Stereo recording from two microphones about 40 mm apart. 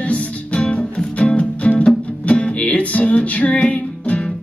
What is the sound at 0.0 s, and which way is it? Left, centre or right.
Music, left.